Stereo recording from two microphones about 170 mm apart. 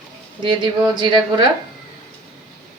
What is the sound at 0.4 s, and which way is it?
Speech, 25° right (ahead or behind).